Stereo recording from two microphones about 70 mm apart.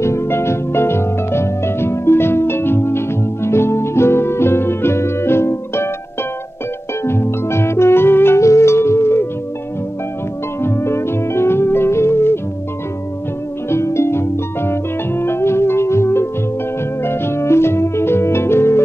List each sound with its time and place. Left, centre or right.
0.0 s music: left
7.1 s music: left
10.6 s music: left
13.7 s harp: left
17.0 s music: left